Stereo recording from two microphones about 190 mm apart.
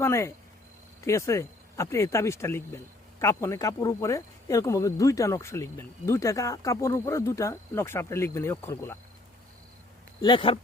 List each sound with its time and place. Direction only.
0.0 s speech: 15° left (ahead or behind)
10.2 s speech: 25° left (ahead or behind)